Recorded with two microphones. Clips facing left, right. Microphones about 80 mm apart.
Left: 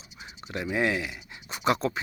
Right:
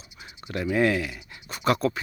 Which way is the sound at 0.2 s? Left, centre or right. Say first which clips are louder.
Right 3 dB; centre.